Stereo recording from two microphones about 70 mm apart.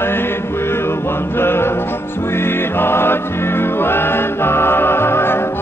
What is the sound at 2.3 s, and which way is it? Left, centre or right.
Music, left.